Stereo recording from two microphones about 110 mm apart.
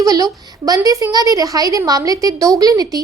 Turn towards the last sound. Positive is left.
turn(degrees=-35)  # may be behind; listen again after turning